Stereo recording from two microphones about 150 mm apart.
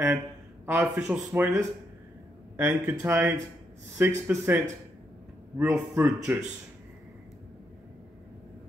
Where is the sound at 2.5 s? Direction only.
15° right (ahead or behind).